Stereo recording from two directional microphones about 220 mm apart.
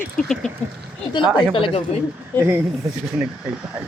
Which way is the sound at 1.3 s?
25° left (ahead or behind).